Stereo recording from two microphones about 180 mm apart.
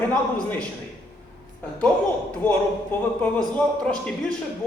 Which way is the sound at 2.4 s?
10° left (ahead or behind).